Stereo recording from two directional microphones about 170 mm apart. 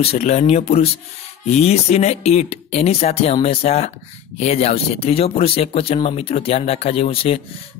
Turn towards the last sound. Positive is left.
turn(degrees=35)  # may be behind; listen again after turning